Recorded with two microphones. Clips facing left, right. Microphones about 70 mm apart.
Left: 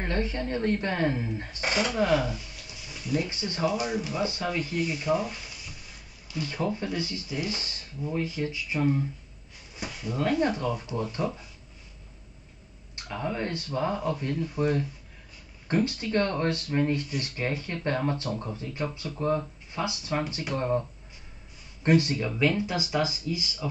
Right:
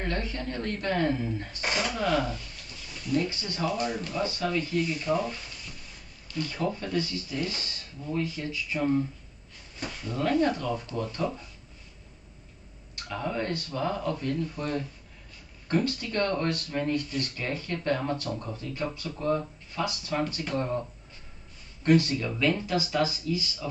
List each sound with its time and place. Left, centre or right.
0.0 s speech: left
3.3 s speech: left
3.7 s speech: centre
9.8 s speech: centre
12.9 s speech: centre
21.8 s speech: left